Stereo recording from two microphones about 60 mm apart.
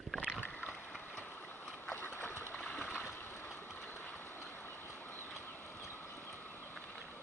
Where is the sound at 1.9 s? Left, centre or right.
Left.